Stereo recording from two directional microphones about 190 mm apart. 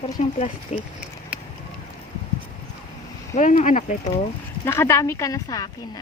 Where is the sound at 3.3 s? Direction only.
40° left (ahead or behind).